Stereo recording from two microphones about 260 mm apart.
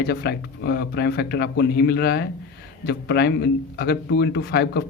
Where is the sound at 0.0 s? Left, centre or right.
Left.